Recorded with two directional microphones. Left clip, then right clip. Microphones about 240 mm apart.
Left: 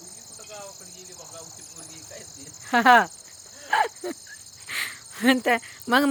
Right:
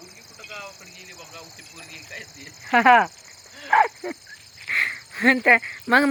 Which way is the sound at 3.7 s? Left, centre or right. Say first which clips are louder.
Right 5 dB; centre.